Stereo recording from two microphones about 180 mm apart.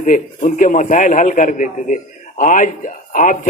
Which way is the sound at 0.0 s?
45° left (ahead or behind).